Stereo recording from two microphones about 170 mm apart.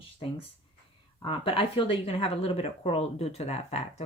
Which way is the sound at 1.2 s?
30° left (ahead or behind).